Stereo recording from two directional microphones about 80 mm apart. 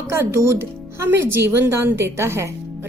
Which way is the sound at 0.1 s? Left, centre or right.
Right.